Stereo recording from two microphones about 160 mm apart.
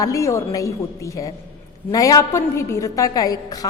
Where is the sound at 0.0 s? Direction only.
20° left (ahead or behind).